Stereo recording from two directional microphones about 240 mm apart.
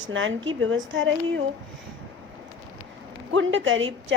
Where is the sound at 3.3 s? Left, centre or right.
Right.